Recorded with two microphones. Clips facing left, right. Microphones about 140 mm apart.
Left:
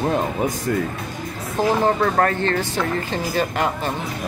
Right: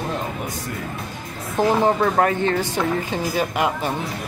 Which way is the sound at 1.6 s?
15° right (ahead or behind).